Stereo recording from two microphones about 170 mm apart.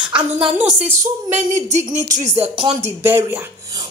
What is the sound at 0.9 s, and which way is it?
Speech, 45° right (ahead or behind).